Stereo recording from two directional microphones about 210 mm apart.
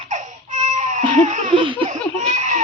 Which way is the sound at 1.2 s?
35° right (ahead or behind).